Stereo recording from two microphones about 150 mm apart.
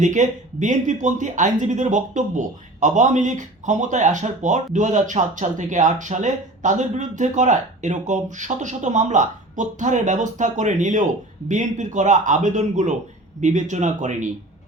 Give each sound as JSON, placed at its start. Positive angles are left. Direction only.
{"t": 0.0, "sound": "speech", "side_deg": -55}